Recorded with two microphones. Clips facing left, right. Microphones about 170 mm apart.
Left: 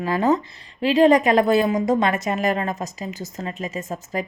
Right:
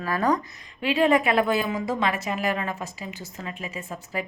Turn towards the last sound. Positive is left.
turn(degrees=40)  # may be behind; listen again after turning